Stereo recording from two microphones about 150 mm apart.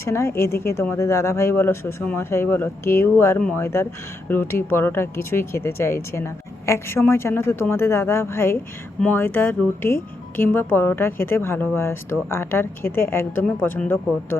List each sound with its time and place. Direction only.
0.1 s speech: 20° left (ahead or behind)